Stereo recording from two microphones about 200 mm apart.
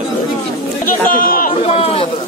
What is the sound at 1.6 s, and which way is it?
Speech, 30° left (ahead or behind).